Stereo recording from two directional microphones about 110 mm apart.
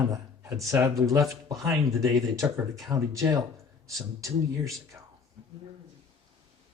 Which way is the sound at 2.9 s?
30° right (ahead or behind).